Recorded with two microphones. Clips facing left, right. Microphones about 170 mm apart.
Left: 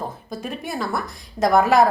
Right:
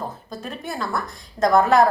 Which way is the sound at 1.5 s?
10° left (ahead or behind).